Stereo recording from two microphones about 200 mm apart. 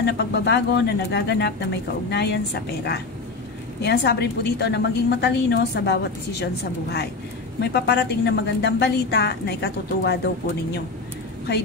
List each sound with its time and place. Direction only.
0.0 s a woman's voice: 60° left (ahead or behind)